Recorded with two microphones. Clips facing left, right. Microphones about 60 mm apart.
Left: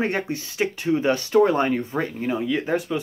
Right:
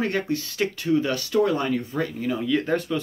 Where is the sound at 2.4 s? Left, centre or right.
Centre.